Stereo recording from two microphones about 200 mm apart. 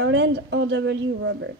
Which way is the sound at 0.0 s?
60° right (ahead or behind).